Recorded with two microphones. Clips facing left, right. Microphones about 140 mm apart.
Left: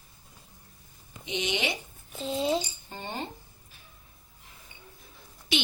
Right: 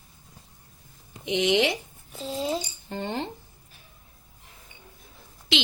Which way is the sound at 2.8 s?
90° right.